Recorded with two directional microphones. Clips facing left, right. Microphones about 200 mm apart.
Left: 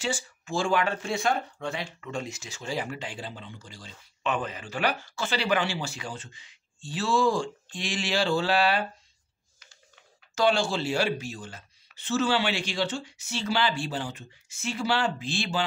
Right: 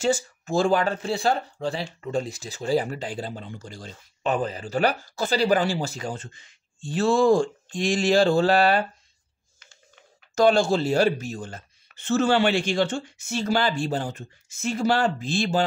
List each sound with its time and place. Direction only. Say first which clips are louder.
0.0 s speech: right 8 dB; 40° right (ahead or behind)
10.3 s speech: right 6 dB; 40° right (ahead or behind)